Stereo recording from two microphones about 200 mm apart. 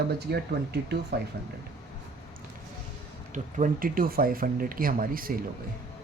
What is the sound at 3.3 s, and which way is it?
Speech, 40° right (ahead or behind).